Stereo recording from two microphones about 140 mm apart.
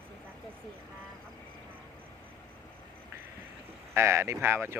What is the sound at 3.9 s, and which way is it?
Speech, 20° right (ahead or behind).